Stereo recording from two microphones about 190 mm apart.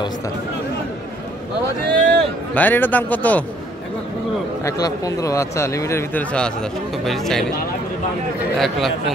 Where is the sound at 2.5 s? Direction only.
10° left (ahead or behind).